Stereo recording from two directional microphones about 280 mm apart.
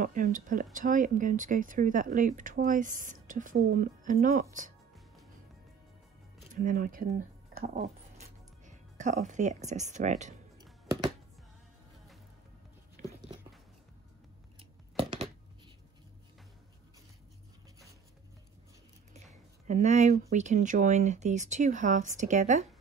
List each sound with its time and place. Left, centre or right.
0.0 s speech: right
6.5 s speech: right
8.6 s music: right
9.7 s speech: right
14.6 s a sound: centre
19.7 s speech: right